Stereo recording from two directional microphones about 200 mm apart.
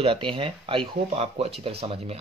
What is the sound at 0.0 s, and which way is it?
Speech, 25° right (ahead or behind).